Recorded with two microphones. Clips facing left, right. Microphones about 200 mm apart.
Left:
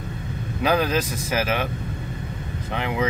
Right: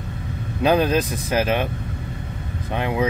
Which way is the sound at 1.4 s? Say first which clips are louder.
Right 3 dB; 20° right (ahead or behind).